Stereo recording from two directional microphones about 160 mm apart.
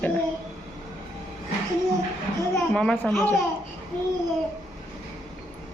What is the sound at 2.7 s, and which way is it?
Speech, 5° left (ahead or behind).